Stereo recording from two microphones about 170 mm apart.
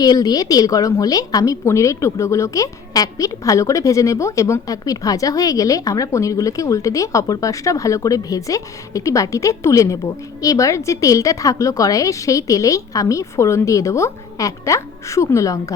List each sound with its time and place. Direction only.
0.0 s a woman's voice: 20° left (ahead or behind)